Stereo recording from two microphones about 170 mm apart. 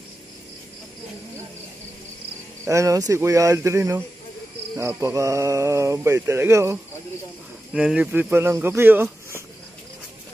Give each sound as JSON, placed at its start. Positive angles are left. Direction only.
{"t": 2.6, "sound": "speech", "side_deg": -15}